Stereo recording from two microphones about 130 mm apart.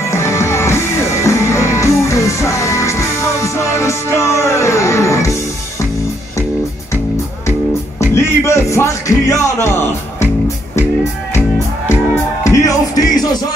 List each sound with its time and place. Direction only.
0.1 s music: 20° left (ahead or behind)
8.0 s music: 20° left (ahead or behind)
12.4 s music: 25° left (ahead or behind)